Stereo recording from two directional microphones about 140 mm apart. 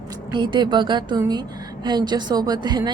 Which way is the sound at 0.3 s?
35° right (ahead or behind).